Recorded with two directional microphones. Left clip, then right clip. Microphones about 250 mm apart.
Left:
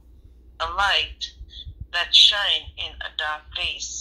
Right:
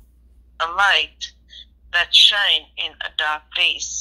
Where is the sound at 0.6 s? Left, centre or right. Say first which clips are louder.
Right 4 dB; right.